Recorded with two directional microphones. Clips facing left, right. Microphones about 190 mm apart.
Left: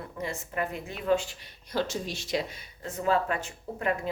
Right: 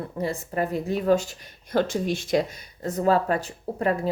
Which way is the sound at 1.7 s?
55° right (ahead or behind).